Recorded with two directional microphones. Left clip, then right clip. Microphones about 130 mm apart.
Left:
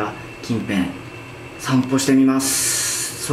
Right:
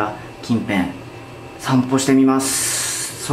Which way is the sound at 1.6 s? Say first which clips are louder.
Right 1 dB; 15° right (ahead or behind).